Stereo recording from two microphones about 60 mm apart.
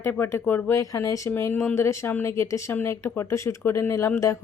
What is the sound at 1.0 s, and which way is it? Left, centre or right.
Speech, left.